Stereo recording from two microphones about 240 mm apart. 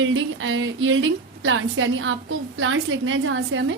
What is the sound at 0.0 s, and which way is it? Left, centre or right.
A woman's voice, right.